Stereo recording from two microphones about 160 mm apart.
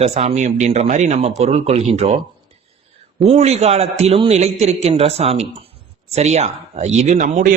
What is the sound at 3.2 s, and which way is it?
A man's voice, 40° right (ahead or behind).